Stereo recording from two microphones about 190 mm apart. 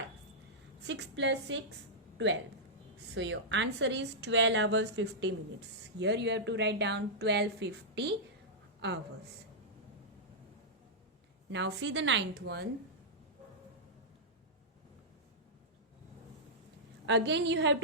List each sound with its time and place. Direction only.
0.9 s a woman's voice: 70° right (ahead or behind)
11.5 s a woman's voice: 70° right (ahead or behind)
17.1 s a woman's voice: 65° right (ahead or behind)